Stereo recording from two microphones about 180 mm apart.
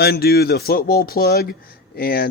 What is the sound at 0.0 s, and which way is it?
A man's voice, 60° left (ahead or behind).